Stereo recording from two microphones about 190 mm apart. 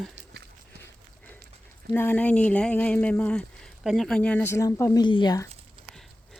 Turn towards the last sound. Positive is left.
turn(degrees=20)  # may be behind; listen again after turning